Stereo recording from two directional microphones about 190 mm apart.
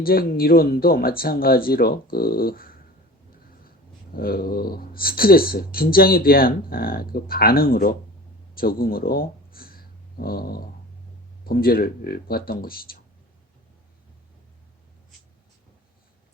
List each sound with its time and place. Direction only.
0.0 s speech: 50° left (ahead or behind)
4.1 s speech: 50° left (ahead or behind)